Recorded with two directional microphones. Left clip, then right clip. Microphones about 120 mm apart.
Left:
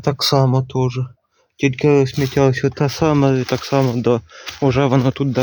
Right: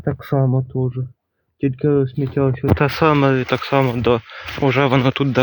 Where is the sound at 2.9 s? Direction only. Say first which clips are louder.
Even; 55° left (ahead or behind); by 5.0 s 70° left (ahead or behind).